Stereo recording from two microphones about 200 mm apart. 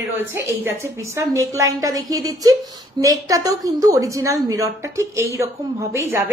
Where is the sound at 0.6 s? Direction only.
15° right (ahead or behind).